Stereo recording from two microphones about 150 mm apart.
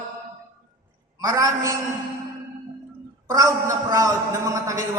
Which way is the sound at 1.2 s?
25° right (ahead or behind).